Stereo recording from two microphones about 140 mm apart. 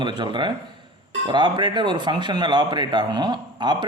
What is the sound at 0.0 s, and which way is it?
A man's voice, 35° right (ahead or behind).